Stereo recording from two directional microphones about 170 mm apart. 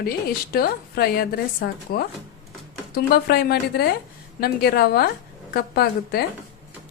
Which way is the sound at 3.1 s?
65° left (ahead or behind).